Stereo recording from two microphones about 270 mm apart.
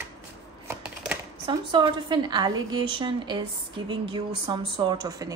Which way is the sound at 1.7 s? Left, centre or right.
Centre.